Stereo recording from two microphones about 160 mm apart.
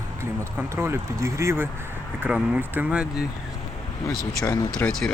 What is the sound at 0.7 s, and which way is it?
Speech, 15° right (ahead or behind).